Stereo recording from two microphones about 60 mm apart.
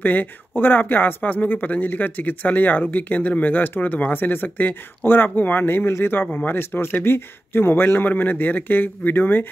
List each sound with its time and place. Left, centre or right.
0.0 s speech: left